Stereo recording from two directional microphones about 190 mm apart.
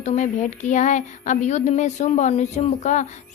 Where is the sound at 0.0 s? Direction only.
40° left (ahead or behind).